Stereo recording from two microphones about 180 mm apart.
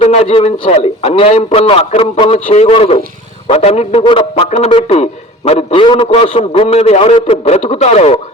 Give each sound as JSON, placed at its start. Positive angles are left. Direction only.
{"t": 0.0, "sound": "speech", "side_deg": 35}